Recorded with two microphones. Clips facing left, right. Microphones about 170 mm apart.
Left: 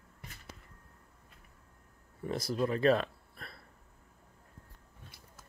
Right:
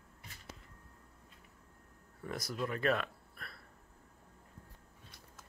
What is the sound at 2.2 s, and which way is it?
Speech, 30° left (ahead or behind).